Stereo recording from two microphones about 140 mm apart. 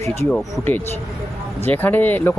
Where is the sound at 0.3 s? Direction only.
10° left (ahead or behind).